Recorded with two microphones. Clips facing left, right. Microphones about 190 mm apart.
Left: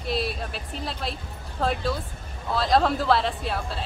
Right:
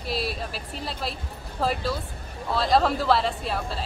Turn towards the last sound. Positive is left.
turn(degrees=0)  # may be behind; listen again after turning